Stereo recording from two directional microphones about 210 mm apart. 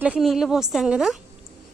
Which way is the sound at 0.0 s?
5° right (ahead or behind).